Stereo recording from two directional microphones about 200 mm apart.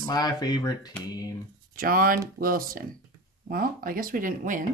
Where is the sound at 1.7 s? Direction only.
45° right (ahead or behind).